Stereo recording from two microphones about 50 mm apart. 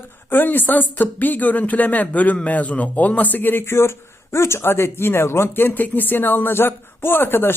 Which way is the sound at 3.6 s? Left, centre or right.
Left.